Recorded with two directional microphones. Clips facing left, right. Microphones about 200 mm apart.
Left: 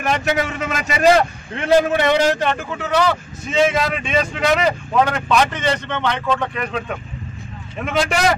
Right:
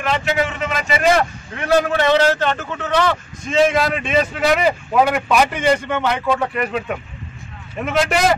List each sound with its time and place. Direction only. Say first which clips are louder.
0.0 s a man's voice: even; 45° left (ahead or behind)
1.6 s a man's voice: left 1 dB; 20° left (ahead or behind); by 8.1 s centre (ahead or behind)